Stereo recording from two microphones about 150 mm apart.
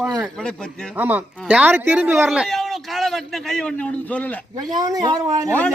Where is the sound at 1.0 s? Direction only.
10° right (ahead or behind); by 4.4 s 10° left (ahead or behind).